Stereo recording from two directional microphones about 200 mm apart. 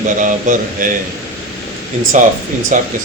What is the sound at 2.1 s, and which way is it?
Speech, 40° right (ahead or behind).